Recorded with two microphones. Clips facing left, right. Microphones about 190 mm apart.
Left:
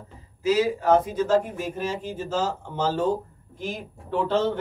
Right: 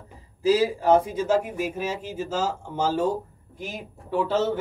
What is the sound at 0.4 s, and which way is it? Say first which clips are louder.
Speech: right 1 dB; 30° right (ahead or behind).